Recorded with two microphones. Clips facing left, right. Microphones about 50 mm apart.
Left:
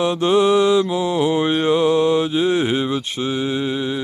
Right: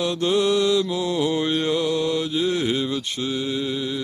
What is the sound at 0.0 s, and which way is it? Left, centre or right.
Mantra, left.